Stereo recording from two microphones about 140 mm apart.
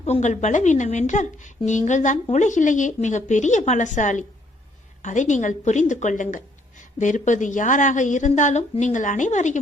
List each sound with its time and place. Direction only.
0.0 s a woman's voice: 55° left (ahead or behind)